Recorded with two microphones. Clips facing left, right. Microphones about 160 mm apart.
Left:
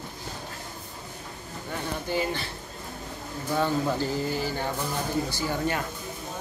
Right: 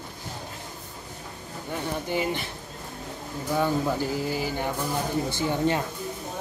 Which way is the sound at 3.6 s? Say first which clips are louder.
Right 1 dB; 10° right (ahead or behind).